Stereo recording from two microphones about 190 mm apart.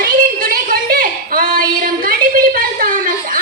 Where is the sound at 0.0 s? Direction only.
50° right (ahead or behind).